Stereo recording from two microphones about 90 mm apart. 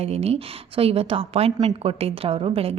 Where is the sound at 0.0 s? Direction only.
90° right.